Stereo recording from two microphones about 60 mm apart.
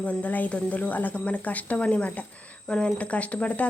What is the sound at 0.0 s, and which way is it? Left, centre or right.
Speech, left.